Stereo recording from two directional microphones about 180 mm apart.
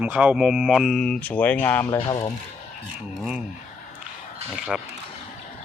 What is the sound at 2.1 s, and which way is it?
Speech, 25° left (ahead or behind).